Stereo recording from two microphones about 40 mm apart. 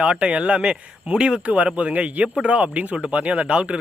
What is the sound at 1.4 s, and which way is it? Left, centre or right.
Speech, right.